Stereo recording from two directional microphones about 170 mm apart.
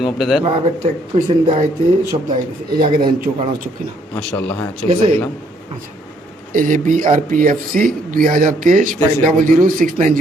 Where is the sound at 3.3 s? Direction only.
25° right (ahead or behind).